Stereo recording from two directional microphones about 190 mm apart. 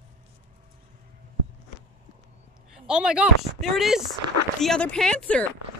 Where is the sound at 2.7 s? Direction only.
5° right (ahead or behind).